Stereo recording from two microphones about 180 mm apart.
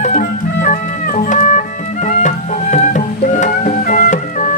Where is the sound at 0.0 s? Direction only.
45° left (ahead or behind).